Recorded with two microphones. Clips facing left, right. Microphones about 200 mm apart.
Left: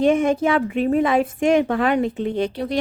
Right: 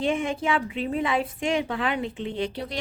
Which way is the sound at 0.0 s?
40° left (ahead or behind).